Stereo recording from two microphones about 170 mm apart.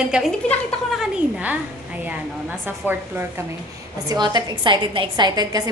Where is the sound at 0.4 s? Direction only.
5° left (ahead or behind).